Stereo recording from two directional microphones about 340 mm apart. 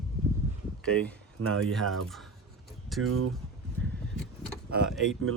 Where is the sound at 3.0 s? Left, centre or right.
Right.